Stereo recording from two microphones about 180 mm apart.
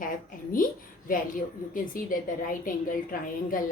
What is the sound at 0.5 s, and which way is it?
Speech, 50° left (ahead or behind).